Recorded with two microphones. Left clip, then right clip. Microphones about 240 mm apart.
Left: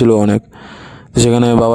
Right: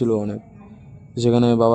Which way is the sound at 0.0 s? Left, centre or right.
Left.